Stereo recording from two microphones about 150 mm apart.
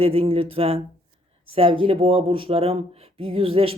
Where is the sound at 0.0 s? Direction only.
40° right (ahead or behind).